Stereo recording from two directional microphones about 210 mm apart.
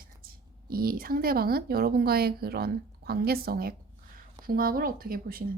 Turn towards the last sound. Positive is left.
turn(degrees=-45)  # may be behind; listen again after turning